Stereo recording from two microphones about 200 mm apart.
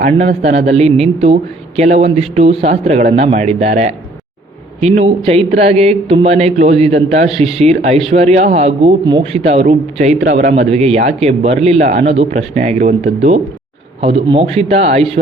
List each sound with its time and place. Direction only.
0.0 s speech: 35° right (ahead or behind)
4.9 s speech: 30° right (ahead or behind)